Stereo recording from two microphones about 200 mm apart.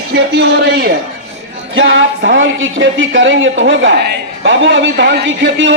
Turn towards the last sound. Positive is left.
turn(degrees=-65)  # may be behind; listen again after turning